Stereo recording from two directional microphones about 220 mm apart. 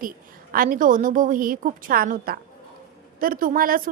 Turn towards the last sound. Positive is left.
turn(degrees=-40)  # may be behind; listen again after turning